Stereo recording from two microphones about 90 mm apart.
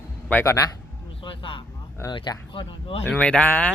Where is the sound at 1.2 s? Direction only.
70° left (ahead or behind).